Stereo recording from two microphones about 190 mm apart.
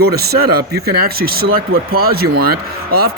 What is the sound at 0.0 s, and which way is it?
Speech, 55° right (ahead or behind).